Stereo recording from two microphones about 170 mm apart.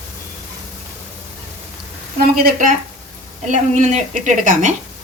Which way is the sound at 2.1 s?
60° right (ahead or behind).